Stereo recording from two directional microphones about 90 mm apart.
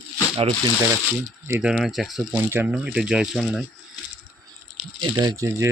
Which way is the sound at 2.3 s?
20° right (ahead or behind).